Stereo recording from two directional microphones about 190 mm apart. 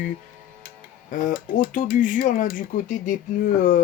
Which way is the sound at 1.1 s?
45° left (ahead or behind).